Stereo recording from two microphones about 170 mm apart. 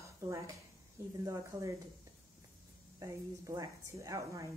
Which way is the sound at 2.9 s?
20° right (ahead or behind).